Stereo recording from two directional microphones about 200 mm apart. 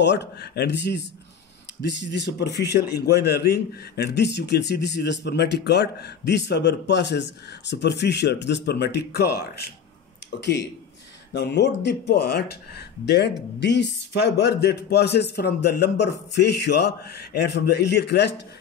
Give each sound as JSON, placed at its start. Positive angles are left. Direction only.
{"t": 0.0, "sound": "a man's voice", "side_deg": 60}